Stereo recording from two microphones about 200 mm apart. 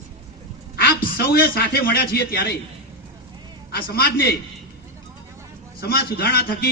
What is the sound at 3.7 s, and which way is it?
Speech, 50° left (ahead or behind).